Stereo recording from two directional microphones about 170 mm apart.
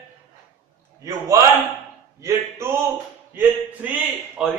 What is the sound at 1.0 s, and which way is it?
A man's voice, 20° right (ahead or behind).